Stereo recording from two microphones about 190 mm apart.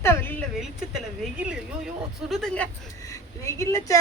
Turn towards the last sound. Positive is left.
turn(degrees=15)  # may be behind; listen again after turning